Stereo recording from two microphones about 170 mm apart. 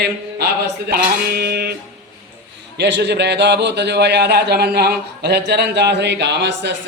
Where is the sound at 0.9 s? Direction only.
65° right (ahead or behind).